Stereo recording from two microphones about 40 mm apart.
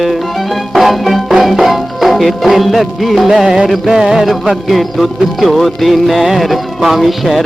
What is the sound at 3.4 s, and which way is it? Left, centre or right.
Music, centre.